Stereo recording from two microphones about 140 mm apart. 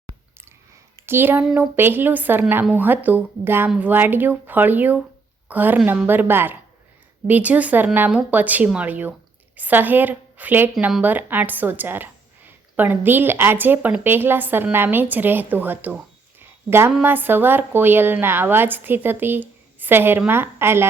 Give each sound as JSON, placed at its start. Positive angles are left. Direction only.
{"t": 1.0, "sound": "a woman's voice", "side_deg": -15}
{"t": 16.4, "sound": "a sound", "side_deg": -15}
{"t": 17.0, "sound": "a woman's voice", "side_deg": -15}